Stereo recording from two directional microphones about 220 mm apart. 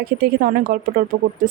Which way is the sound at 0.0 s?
45° right (ahead or behind).